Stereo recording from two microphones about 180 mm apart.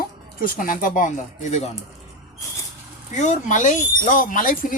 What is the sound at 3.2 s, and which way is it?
Speech, 45° left (ahead or behind).